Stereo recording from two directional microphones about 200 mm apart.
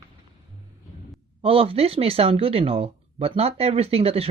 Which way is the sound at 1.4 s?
30° right (ahead or behind).